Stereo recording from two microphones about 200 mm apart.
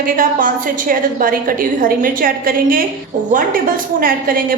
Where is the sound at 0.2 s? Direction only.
45° right (ahead or behind).